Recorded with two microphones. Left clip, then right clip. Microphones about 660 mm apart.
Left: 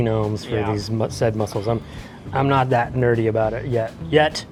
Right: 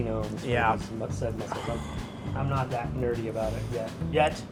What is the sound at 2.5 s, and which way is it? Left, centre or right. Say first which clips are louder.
Speech: left 13 dB; left.